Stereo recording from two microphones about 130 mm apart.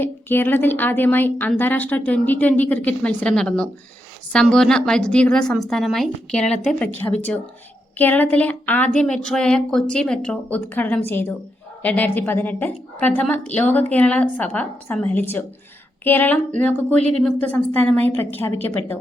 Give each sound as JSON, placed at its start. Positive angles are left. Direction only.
{"t": 0.0, "sound": "a woman's voice", "side_deg": 15}
{"t": 17.0, "sound": "speech", "side_deg": -60}
{"t": 17.4, "sound": "a woman's voice", "side_deg": 10}